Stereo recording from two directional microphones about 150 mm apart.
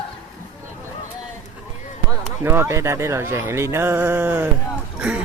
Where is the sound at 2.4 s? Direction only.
15° right (ahead or behind).